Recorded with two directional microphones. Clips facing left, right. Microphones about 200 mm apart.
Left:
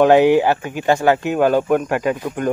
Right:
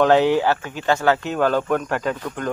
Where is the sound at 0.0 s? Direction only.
15° left (ahead or behind).